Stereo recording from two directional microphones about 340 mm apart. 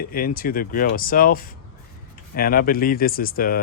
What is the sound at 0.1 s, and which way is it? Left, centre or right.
Speech, left.